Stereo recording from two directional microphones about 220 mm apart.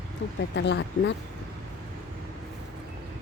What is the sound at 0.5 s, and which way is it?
Speech, 50° left (ahead or behind).